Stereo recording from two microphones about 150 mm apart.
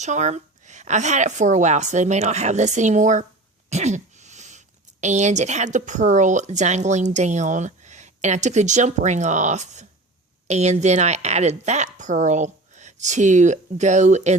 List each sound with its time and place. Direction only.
0.0 s speech: 50° right (ahead or behind)